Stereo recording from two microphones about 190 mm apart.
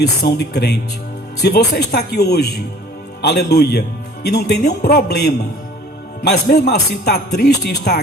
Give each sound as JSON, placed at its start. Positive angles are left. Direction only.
{"t": 0.2, "sound": "a man's voice", "side_deg": 60}